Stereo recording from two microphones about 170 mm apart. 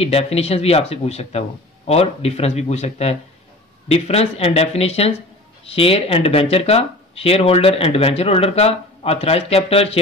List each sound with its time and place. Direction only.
0.0 s speech: 35° left (ahead or behind)